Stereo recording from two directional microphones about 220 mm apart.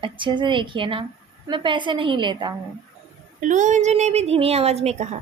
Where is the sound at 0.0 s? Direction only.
20° right (ahead or behind).